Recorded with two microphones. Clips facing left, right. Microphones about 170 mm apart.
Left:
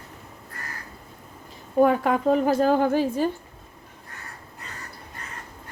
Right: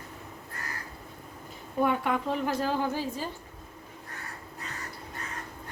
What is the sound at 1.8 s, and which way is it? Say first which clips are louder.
A woman's voice: left 8 dB; 40° left (ahead or behind).